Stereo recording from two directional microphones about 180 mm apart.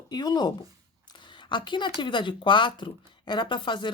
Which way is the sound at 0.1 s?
20° left (ahead or behind).